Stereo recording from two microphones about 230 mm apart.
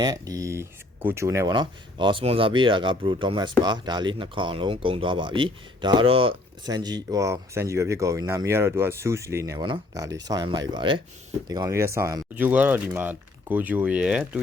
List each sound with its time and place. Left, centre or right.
0.0 s speech: centre